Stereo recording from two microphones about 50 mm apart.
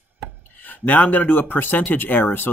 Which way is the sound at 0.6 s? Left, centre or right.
Left.